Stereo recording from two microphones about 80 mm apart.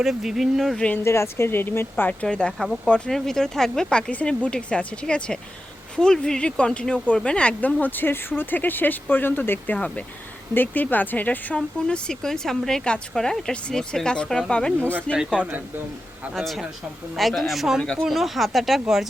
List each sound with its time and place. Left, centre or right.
0.0 s speech: centre
0.9 s speech: left
2.2 s speech: centre
15.2 s speech: centre
16.3 s speech: centre